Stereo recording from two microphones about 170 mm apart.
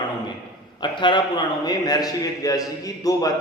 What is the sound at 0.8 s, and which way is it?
A man's voice, 25° left (ahead or behind).